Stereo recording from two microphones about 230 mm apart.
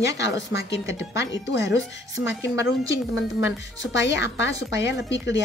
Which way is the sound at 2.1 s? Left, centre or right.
Centre.